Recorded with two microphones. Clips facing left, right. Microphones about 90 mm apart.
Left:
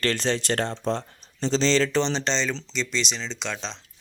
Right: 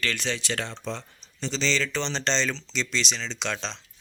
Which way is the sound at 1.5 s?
30° left (ahead or behind).